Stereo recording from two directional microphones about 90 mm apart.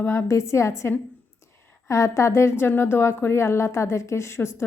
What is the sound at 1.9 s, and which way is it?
A woman's voice, 35° left (ahead or behind).